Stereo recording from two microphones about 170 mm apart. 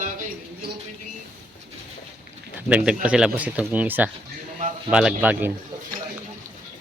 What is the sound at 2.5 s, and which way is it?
Speech, 10° right (ahead or behind).